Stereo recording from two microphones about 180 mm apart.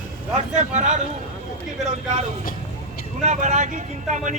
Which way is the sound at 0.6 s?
40° right (ahead or behind).